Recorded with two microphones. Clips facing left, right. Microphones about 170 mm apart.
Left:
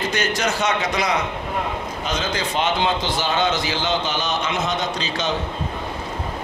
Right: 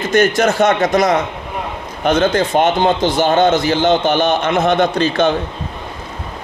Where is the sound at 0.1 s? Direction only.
50° right (ahead or behind).